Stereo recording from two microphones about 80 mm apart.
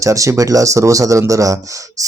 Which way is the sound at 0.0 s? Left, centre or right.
Right.